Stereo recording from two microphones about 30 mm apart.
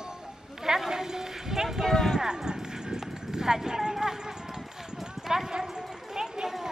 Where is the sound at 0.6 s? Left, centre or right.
Centre.